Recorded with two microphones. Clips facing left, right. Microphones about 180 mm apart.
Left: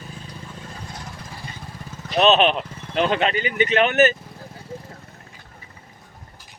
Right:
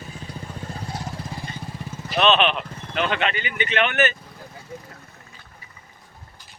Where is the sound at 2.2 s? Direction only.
40° left (ahead or behind).